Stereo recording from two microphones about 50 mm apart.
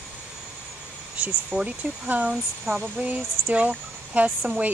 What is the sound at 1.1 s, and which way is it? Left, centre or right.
Speech, right.